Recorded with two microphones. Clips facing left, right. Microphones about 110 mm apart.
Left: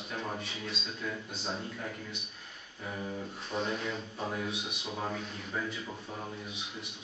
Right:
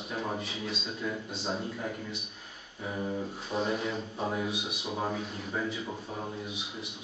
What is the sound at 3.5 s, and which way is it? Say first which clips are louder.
A man's voice: right 3 dB; 5° right (ahead or behind).